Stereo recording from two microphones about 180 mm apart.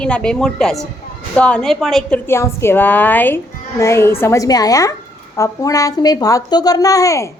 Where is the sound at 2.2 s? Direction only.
15° left (ahead or behind).